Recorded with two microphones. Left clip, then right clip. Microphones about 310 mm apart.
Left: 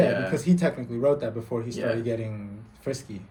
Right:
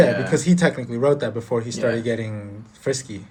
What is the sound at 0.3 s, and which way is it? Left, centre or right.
Speech, right.